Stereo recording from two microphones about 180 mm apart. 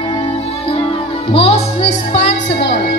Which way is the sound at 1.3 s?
30° left (ahead or behind).